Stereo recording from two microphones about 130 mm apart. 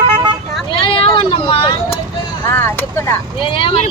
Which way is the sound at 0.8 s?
40° left (ahead or behind).